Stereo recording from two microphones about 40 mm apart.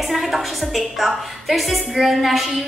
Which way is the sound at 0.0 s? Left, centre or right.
Centre.